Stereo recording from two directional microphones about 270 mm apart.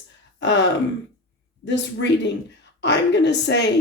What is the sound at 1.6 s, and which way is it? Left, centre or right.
Speech, left.